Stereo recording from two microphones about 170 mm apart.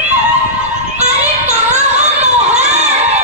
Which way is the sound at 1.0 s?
40° right (ahead or behind).